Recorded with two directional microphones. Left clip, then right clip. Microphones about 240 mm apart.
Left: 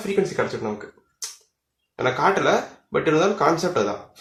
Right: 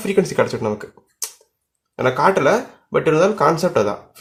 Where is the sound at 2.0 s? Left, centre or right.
Right.